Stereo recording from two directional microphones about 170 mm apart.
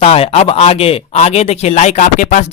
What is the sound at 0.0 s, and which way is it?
Speech, 35° left (ahead or behind).